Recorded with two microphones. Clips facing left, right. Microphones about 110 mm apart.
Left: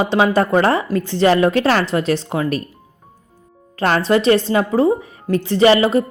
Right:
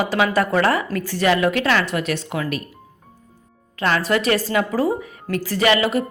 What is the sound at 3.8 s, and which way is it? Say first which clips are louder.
A woman's voice: left 4 dB; 35° left (ahead or behind).